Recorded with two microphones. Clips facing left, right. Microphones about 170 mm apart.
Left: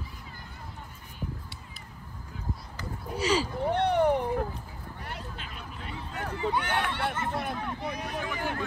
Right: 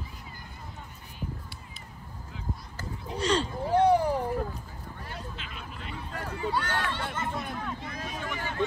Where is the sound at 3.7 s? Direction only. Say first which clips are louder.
Right 2 dB; 70° left (ahead or behind).